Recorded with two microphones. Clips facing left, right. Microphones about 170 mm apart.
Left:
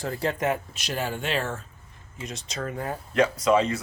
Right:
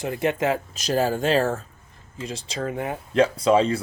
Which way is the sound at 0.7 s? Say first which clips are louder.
Right 8 dB; 40° right (ahead or behind).